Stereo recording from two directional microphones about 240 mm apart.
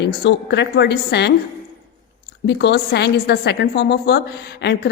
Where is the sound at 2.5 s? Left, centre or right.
Left.